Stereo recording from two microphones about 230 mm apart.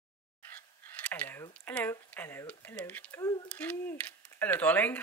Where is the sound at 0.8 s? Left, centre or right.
Centre.